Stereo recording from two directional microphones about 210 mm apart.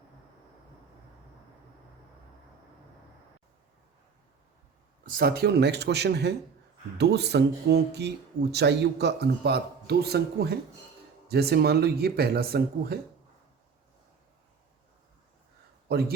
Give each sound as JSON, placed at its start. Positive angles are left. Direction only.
{"t": 5.0, "sound": "speech", "side_deg": -45}
{"t": 15.9, "sound": "speech", "side_deg": -50}